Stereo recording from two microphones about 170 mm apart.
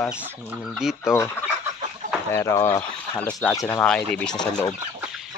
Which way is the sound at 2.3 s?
15° left (ahead or behind).